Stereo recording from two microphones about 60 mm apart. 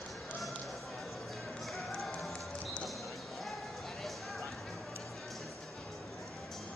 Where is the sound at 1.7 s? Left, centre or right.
Centre.